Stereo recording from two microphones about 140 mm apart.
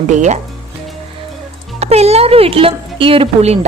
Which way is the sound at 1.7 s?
50° right (ahead or behind).